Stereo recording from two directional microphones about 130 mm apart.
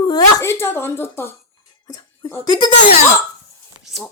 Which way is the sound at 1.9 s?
30° left (ahead or behind).